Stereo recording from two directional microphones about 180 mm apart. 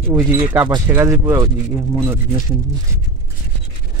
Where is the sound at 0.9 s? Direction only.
15° right (ahead or behind).